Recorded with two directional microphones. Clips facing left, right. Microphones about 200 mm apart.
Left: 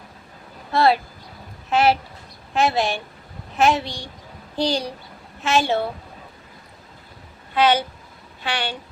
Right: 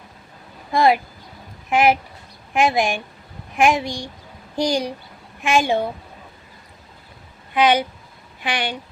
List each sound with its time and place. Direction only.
0.7 s a woman's voice: 15° right (ahead or behind)
7.5 s a woman's voice: 15° right (ahead or behind)